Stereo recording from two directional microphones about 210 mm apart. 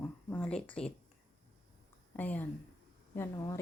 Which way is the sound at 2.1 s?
10° left (ahead or behind).